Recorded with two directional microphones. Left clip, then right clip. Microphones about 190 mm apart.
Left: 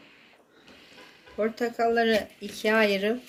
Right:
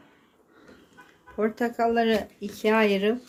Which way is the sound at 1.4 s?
50° right (ahead or behind).